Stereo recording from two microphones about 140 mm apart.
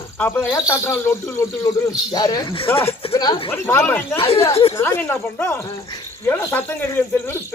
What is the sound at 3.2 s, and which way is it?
Speech, 30° left (ahead or behind).